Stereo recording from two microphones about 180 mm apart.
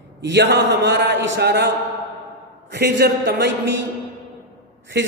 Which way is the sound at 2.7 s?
65° right (ahead or behind).